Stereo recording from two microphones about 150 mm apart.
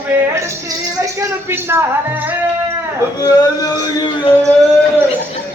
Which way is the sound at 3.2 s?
25° left (ahead or behind).